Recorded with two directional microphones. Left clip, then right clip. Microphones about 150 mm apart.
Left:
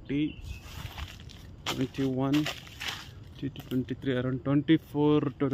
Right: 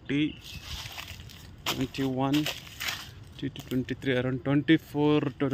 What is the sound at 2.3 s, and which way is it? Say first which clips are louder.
Speech: right 1 dB; 90° right.